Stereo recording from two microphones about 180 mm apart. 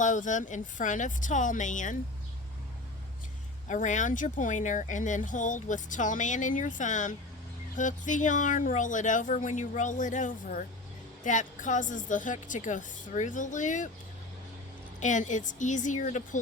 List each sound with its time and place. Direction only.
0.0 s speech: 45° left (ahead or behind)
3.7 s speech: 45° left (ahead or behind)
15.0 s speech: 45° left (ahead or behind)